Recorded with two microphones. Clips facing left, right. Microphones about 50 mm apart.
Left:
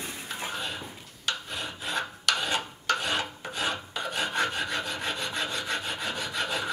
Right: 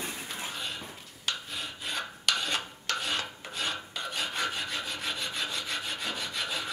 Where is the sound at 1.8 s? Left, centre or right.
Centre.